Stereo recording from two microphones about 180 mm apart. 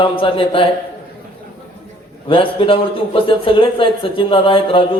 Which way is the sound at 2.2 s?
30° left (ahead or behind).